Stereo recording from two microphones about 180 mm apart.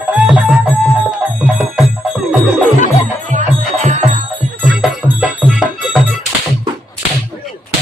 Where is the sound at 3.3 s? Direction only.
40° right (ahead or behind).